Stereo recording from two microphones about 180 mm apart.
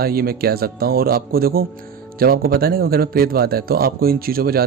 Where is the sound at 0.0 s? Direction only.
55° right (ahead or behind).